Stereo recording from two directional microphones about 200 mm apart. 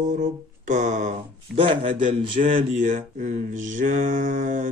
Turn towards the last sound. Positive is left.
turn(degrees=-40)  # may be behind; listen again after turning